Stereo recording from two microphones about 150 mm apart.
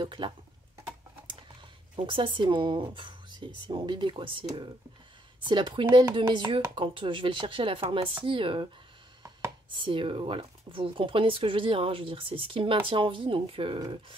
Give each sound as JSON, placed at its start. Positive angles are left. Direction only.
{"t": 0.0, "sound": "speech", "side_deg": -35}
{"t": 2.0, "sound": "speech", "side_deg": -35}
{"t": 9.7, "sound": "speech", "side_deg": -35}